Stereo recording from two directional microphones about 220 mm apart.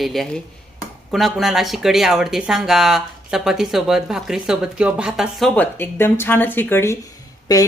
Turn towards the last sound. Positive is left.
turn(degrees=15)  # may be behind; listen again after turning